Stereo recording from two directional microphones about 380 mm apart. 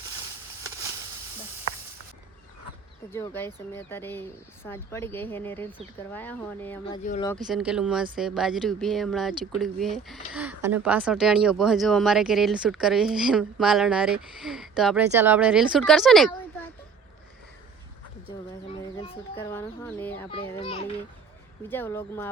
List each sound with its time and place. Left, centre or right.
3.1 s speech: centre
7.0 s speech: centre
7.4 s speech: centre
18.7 s speech: centre